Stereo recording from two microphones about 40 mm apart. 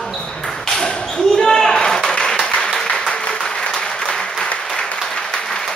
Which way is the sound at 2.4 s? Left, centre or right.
Centre.